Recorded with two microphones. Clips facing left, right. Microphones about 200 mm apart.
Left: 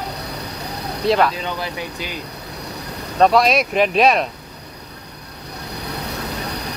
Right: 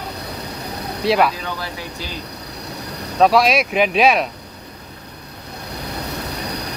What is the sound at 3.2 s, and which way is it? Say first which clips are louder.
Speech: even; centre (ahead or behind).